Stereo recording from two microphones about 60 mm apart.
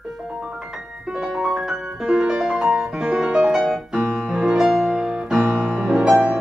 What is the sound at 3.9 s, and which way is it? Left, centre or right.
Piano, centre.